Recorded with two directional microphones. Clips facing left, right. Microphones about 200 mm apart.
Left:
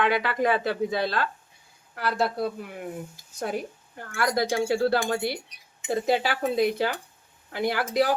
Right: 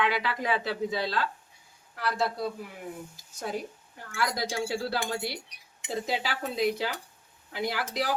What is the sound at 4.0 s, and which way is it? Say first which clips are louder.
A woman's voice: left 5 dB; 55° left (ahead or behind).